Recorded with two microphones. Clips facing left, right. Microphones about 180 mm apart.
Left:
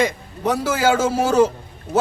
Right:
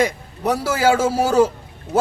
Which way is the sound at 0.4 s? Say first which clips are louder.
Right 1 dB; 10° right (ahead or behind).